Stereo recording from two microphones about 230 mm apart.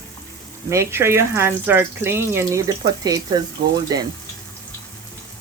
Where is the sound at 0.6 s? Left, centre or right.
Centre.